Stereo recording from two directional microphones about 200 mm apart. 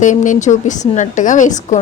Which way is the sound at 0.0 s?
40° left (ahead or behind).